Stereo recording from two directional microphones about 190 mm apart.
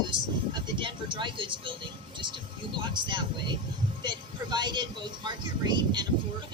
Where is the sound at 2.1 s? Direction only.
25° right (ahead or behind).